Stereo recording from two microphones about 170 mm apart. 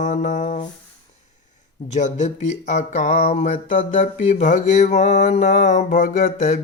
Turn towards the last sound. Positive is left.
turn(degrees=55)  # may be behind; listen again after turning